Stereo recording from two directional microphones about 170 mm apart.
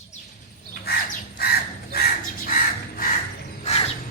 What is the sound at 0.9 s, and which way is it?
Bird, 65° left (ahead or behind).